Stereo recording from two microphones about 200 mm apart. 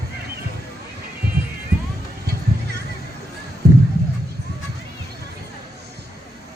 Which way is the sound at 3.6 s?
50° right (ahead or behind).